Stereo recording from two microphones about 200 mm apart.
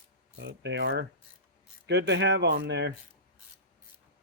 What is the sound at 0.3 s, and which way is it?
Speech, 60° right (ahead or behind).